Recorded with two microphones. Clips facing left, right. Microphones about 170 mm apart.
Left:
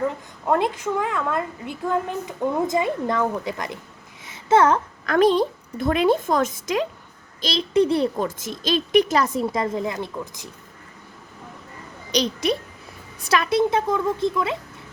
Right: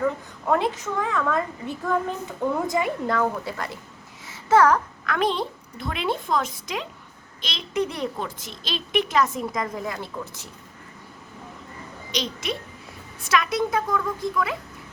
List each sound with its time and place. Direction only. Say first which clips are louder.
0.4 s a woman's voice: left 2 dB; 15° left (ahead or behind)
4.3 s a sound: left 1 dB; 25° left (ahead or behind)
5.0 s a woman's voice: left 8 dB; 40° left (ahead or behind)
7.4 s a child's voice: left 7 dB; 35° left (ahead or behind); by 10.5 s 15° left (ahead or behind)
12.1 s a child's voice: left 7 dB; 40° left (ahead or behind)